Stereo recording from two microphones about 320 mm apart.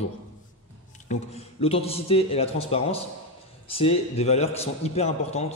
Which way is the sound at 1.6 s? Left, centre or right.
Centre.